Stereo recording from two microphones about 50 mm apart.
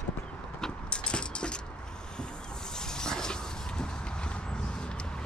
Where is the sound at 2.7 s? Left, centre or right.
Centre.